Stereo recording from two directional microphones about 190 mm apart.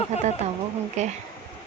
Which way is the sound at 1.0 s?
35° right (ahead or behind).